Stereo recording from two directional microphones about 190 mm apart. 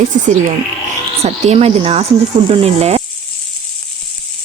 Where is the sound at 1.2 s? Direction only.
35° right (ahead or behind).